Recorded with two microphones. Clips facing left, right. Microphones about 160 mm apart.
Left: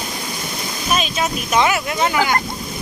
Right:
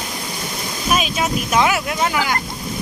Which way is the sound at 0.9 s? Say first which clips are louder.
Right 1 dB; 5° right (ahead or behind).